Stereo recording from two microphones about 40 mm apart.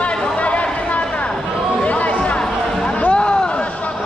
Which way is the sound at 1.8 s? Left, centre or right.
Left.